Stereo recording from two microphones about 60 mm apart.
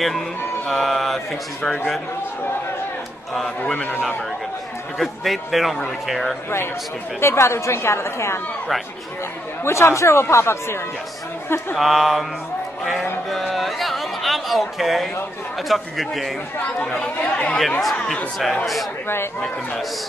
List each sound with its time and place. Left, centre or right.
0.7 s speech: centre
4.9 s speech: centre
7.2 s a woman's voice: left
9.7 s a woman's voice: left
11.7 s speech: centre
13.3 s a sound: centre
15.7 s speech: centre
17.0 s speech: left
17.6 s speech: centre
17.9 s speech: centre